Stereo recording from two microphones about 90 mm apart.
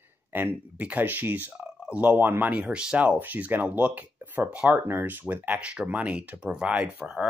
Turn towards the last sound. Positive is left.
turn(degrees=-5)  # may be behind; listen again after turning